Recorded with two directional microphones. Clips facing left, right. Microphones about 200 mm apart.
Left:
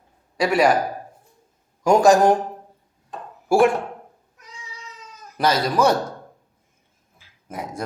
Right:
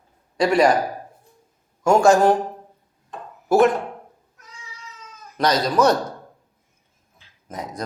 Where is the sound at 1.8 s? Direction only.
15° left (ahead or behind).